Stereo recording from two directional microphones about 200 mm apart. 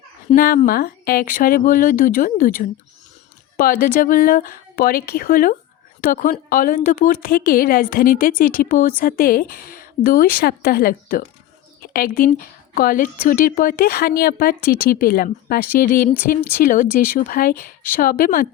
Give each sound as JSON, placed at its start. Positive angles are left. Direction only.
{"t": 0.3, "sound": "a woman's voice", "side_deg": 45}